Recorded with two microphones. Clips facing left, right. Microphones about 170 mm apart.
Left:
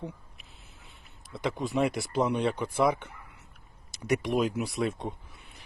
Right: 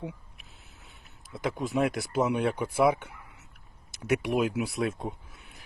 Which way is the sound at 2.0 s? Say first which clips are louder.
Right 1 dB; centre (ahead or behind).